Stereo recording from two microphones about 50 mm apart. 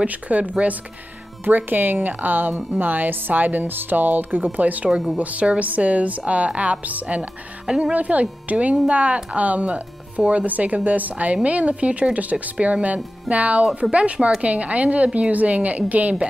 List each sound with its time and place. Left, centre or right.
0.0 s speech: right
1.4 s speech: right
7.6 s speech: centre
7.9 s speech: right